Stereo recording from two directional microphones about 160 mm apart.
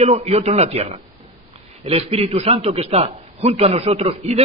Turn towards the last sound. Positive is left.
turn(degrees=-40)  # may be behind; listen again after turning